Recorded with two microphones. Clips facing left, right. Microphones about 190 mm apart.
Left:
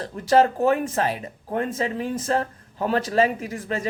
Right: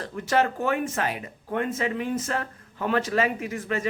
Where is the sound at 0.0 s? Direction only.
35° left (ahead or behind).